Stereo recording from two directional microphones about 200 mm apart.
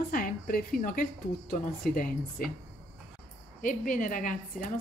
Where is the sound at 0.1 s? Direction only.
45° left (ahead or behind).